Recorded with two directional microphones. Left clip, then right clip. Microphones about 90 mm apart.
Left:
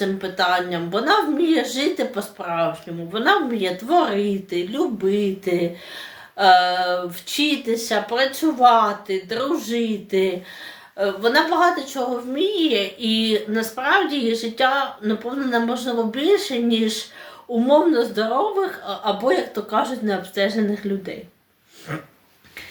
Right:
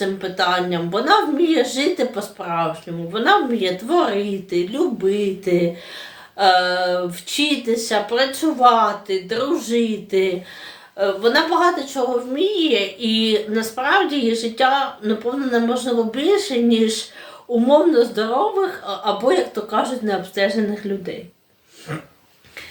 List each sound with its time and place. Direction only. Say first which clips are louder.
0.0 s a woman's voice: right 1 dB; 25° left (ahead or behind)